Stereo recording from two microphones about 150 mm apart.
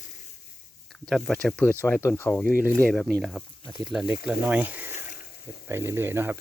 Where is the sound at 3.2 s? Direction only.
5° right (ahead or behind).